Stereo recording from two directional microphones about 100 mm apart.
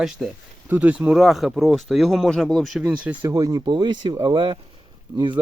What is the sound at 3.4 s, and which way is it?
Speech, 35° right (ahead or behind).